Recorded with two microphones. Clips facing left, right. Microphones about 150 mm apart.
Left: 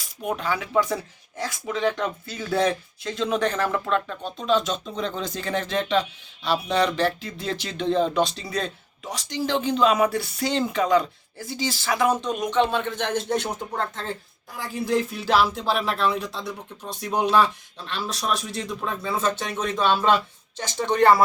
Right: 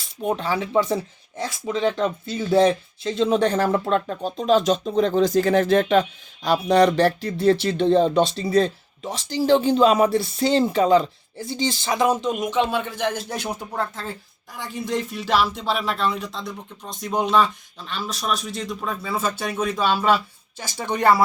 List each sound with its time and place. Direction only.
0.2 s speech: 30° right (ahead or behind); by 14.2 s 5° right (ahead or behind)
14.6 s speech: 5° left (ahead or behind)
19.1 s speech: 5° right (ahead or behind)